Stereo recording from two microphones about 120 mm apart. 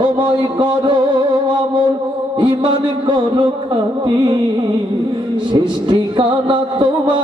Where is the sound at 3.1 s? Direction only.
45° right (ahead or behind).